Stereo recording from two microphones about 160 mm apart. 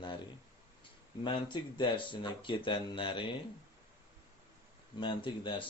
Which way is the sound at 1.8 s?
30° left (ahead or behind).